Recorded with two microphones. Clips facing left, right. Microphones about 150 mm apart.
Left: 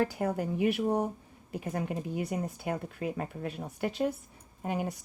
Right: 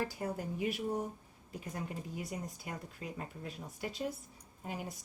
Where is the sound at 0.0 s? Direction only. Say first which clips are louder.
Left 8 dB; 70° left (ahead or behind).